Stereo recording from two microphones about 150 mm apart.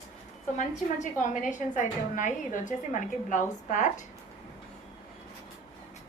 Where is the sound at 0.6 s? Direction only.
55° left (ahead or behind).